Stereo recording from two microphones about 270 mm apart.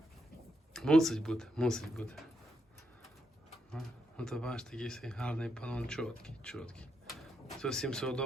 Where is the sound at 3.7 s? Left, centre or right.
Centre.